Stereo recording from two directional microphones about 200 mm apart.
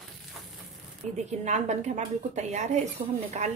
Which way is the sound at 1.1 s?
35° right (ahead or behind).